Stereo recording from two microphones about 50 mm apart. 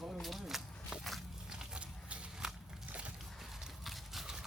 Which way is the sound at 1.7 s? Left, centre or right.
Right.